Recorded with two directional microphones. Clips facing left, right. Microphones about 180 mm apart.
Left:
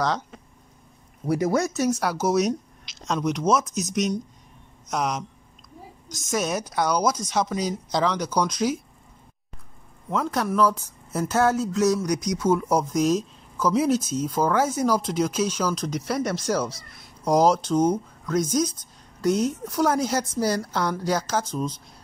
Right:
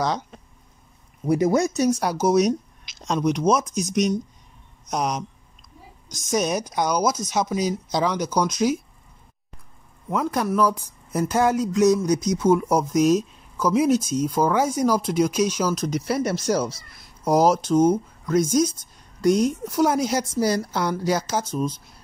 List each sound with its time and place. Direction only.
1.3 s speech: 20° right (ahead or behind)
6.3 s speech: 15° right (ahead or behind)
10.1 s speech: 10° right (ahead or behind)
12.5 s speech: 10° right (ahead or behind)